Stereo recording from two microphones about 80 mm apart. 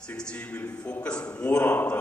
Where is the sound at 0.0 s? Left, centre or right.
Centre.